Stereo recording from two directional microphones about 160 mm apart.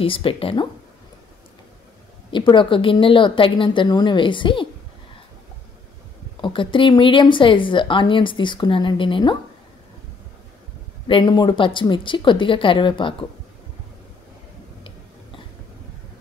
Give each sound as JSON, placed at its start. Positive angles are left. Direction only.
{"t": 0.0, "sound": "a woman's voice", "side_deg": 35}
{"t": 2.3, "sound": "a woman's voice", "side_deg": 30}
{"t": 6.4, "sound": "a woman's voice", "side_deg": 30}
{"t": 11.1, "sound": "a woman's voice", "side_deg": 30}